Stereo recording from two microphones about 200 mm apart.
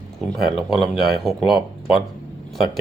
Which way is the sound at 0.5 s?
Centre (ahead or behind).